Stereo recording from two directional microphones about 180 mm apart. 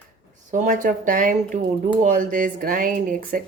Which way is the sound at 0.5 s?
45° right (ahead or behind).